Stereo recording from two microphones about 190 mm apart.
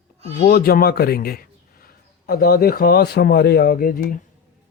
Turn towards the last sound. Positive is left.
turn(degrees=50)  # may be behind; listen again after turning